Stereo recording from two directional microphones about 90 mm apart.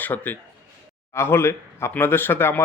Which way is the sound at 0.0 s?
20° left (ahead or behind).